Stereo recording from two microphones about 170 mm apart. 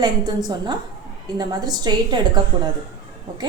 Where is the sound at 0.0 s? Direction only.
25° right (ahead or behind).